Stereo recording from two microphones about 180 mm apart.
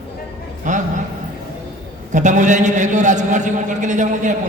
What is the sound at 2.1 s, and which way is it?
A man's voice, 40° right (ahead or behind).